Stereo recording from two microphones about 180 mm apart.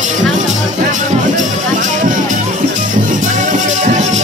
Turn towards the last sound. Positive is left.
turn(degrees=-40)  # may be behind; listen again after turning